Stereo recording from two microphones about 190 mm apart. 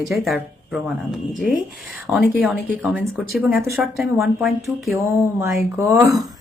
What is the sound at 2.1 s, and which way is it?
Speech, centre (ahead or behind).